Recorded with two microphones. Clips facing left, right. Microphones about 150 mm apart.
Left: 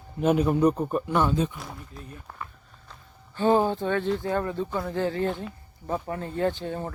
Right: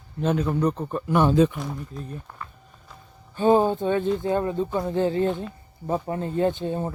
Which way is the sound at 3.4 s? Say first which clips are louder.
Right 3 dB; 15° right (ahead or behind).